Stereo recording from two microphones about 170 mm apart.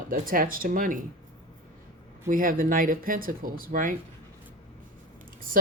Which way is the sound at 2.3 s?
55° right (ahead or behind).